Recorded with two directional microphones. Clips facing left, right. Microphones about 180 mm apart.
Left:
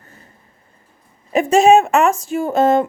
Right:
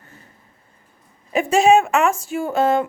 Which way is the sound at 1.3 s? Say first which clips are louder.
Left 3 dB; 40° left (ahead or behind).